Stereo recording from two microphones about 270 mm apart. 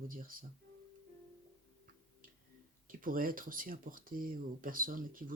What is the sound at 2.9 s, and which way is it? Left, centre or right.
Speech, right.